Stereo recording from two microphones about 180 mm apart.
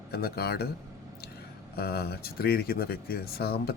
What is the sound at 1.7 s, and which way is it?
Speech, 60° left (ahead or behind).